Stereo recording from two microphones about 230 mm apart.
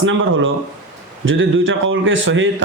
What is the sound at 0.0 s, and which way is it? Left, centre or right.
A man's voice, right.